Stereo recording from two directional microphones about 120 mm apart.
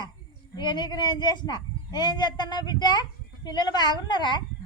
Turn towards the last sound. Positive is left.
turn(degrees=40)  # may be behind; listen again after turning